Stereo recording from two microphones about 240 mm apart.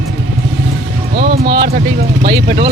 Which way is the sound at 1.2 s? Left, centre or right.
Right.